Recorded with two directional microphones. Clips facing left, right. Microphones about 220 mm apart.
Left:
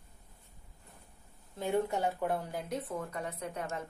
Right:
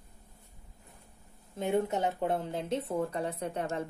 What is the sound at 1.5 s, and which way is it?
A woman's voice, 20° right (ahead or behind).